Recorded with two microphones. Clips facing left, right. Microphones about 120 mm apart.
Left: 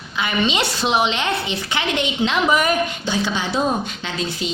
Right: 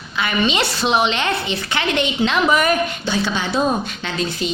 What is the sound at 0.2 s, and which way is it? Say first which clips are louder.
A woman's voice: right 1 dB; 15° left (ahead or behind).